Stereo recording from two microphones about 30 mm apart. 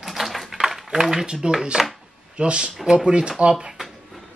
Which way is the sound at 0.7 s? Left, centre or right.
Centre.